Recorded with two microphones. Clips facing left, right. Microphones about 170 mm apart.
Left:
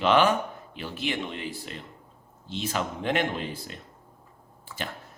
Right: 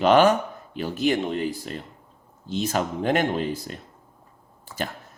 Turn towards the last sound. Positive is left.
turn(degrees=-40)  # may be behind; listen again after turning